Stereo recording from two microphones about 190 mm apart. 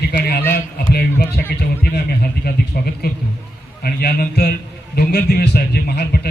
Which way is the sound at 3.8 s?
55° left (ahead or behind).